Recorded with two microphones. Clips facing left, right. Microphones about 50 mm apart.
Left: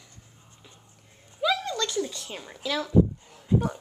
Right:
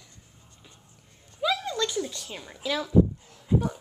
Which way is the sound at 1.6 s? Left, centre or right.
Centre.